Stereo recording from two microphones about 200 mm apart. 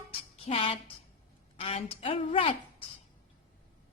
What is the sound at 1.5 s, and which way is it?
A woman's voice, 30° left (ahead or behind).